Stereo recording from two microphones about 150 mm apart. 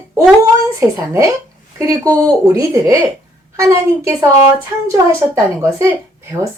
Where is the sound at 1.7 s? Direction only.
20° right (ahead or behind).